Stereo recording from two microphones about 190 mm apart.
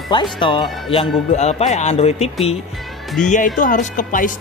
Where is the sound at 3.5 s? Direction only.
45° left (ahead or behind).